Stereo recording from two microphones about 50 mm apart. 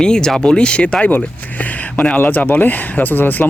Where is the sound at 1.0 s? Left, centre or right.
Left.